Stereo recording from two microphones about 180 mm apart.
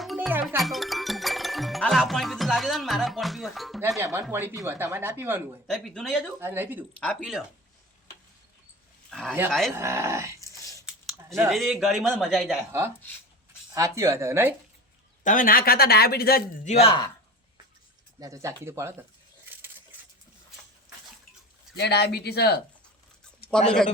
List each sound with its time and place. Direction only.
0.0 s music: centre (ahead or behind)
0.4 s speech: centre (ahead or behind)
3.8 s speech: 15° right (ahead or behind)
5.6 s speech: centre (ahead or behind)
6.4 s speech: 10° right (ahead or behind)
7.0 s speech: 5° left (ahead or behind)
9.0 s a sound: 5° left (ahead or behind)
9.5 s speech: centre (ahead or behind)
9.7 s speech: 15° right (ahead or behind)
11.5 s speech: centre (ahead or behind)
15.2 s speech: 45° left (ahead or behind)
16.6 s speech: 35° left (ahead or behind)
18.2 s speech: 15° right (ahead or behind)
21.8 s speech: 65° left (ahead or behind)